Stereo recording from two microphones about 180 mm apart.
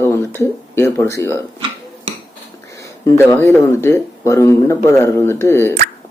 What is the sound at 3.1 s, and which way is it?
Speech, 15° left (ahead or behind).